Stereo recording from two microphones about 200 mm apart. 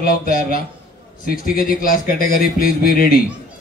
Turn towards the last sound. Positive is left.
turn(degrees=45)  # may be behind; listen again after turning